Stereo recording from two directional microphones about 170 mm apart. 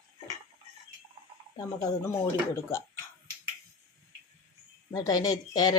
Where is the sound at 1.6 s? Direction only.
20° left (ahead or behind).